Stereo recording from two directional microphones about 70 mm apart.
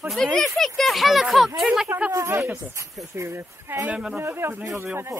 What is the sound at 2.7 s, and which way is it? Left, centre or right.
Speech, right.